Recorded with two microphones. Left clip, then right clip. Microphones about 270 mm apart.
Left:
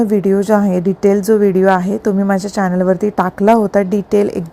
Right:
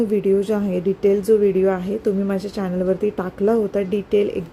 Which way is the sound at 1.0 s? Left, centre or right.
Left.